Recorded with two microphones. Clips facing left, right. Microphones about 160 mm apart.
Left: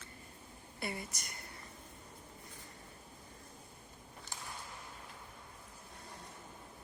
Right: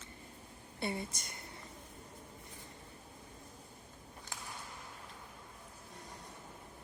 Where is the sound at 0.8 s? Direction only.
25° right (ahead or behind).